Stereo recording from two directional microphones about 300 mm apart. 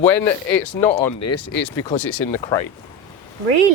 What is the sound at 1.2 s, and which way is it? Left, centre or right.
Speech, left.